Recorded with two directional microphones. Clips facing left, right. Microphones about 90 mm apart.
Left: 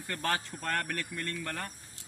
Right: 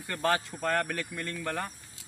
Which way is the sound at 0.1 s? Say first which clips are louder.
Right 5 dB; 5° right (ahead or behind).